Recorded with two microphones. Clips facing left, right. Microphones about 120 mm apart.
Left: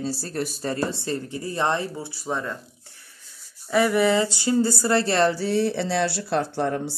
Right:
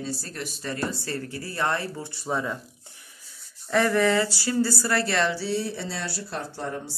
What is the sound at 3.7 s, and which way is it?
Speech, 10° left (ahead or behind).